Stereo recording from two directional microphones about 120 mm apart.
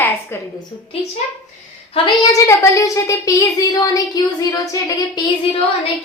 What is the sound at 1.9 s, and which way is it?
Speech, 40° left (ahead or behind).